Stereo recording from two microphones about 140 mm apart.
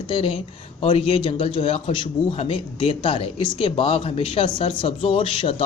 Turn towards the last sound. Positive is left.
turn(degrees=40)  # may be behind; listen again after turning